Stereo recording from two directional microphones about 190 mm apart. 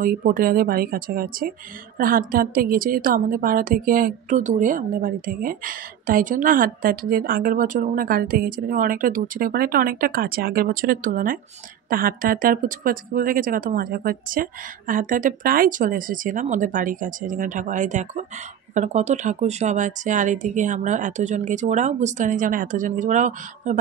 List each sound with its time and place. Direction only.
0.0 s a woman's voice: 45° right (ahead or behind)